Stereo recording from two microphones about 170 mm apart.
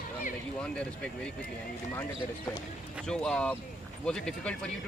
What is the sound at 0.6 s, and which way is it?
Speech, 5° left (ahead or behind).